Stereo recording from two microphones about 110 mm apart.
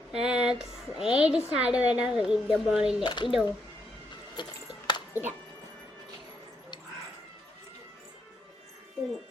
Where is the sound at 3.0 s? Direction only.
45° left (ahead or behind).